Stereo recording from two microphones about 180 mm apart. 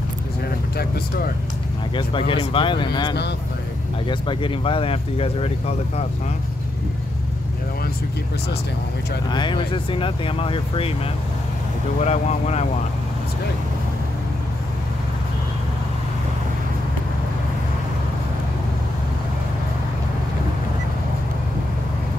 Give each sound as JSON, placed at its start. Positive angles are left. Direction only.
{"t": 0.7, "sound": "speech", "side_deg": 55}
{"t": 2.0, "sound": "speech", "side_deg": 30}
{"t": 9.3, "sound": "speech", "side_deg": 25}
{"t": 12.0, "sound": "speech", "side_deg": 40}